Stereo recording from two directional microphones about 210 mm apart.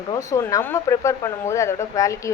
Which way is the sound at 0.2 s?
15° left (ahead or behind).